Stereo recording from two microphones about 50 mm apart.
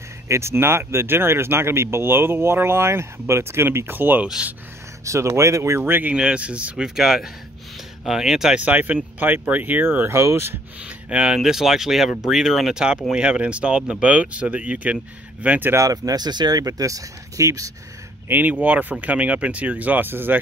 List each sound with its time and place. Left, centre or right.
0.3 s speech: right
4.4 s speech: right
5.0 s speech: right
5.8 s speech: right
6.1 s speech: right
6.8 s speech: centre
8.5 s speech: right
10.1 s speech: right
11.1 s speech: right
11.3 s speech: centre
13.1 s speech: right
16.0 s speech: right
17.4 s speech: right
18.3 s speech: right